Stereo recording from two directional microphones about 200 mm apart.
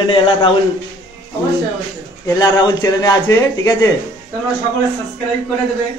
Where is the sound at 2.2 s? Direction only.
20° left (ahead or behind).